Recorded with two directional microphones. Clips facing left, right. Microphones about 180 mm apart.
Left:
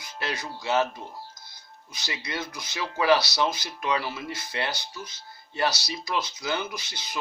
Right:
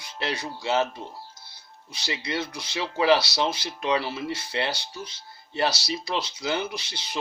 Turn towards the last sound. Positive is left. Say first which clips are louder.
# right 2 dB
turn(degrees=-30)  # may be behind; listen again after turning